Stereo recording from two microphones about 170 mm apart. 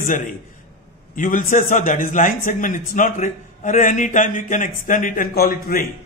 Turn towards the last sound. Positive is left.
turn(degrees=60)  # may be behind; listen again after turning